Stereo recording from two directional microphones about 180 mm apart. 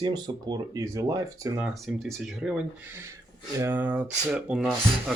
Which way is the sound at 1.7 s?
Centre (ahead or behind).